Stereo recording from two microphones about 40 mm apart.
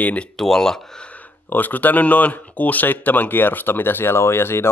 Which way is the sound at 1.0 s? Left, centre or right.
Left.